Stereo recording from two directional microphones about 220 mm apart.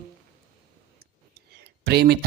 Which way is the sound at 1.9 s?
45° right (ahead or behind).